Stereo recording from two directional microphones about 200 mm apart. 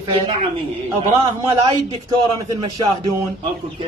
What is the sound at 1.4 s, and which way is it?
Speech, 25° right (ahead or behind).